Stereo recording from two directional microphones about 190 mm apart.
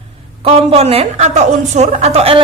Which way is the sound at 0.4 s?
30° right (ahead or behind).